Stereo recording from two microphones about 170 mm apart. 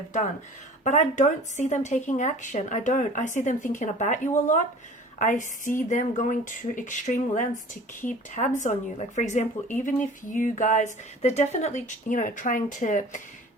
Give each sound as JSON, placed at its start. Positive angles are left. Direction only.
{"t": 0.9, "sound": "speech", "side_deg": 45}